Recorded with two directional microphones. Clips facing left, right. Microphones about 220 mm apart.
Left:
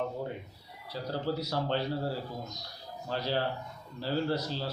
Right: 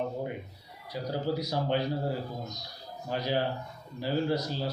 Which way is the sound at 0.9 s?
15° right (ahead or behind).